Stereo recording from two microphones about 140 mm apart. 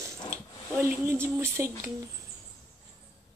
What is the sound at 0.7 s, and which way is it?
Speech, 15° right (ahead or behind).